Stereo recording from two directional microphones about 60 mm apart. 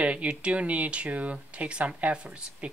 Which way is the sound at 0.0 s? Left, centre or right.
Right.